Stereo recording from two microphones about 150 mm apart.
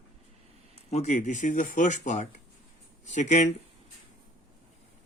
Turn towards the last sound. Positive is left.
turn(degrees=55)  # may be behind; listen again after turning